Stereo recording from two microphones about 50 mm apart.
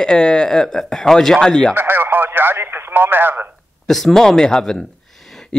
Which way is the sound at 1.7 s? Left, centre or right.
Right.